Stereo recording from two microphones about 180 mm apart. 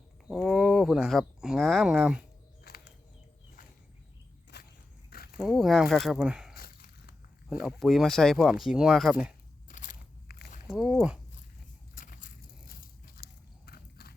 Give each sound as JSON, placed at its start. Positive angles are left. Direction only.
{"t": 0.3, "sound": "speech", "side_deg": 0}
{"t": 2.6, "sound": "a sound", "side_deg": 60}
{"t": 4.5, "sound": "a sound", "side_deg": 65}
{"t": 5.4, "sound": "speech", "side_deg": 0}
{"t": 6.5, "sound": "a sound", "side_deg": 55}
{"t": 7.6, "sound": "speech", "side_deg": 0}
{"t": 9.6, "sound": "biting", "side_deg": 45}
{"t": 10.7, "sound": "speech", "side_deg": -5}
{"t": 11.9, "sound": "biting", "side_deg": 50}